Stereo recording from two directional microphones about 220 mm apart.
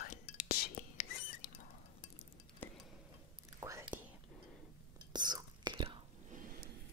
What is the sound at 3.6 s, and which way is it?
Whispering, 10° right (ahead or behind).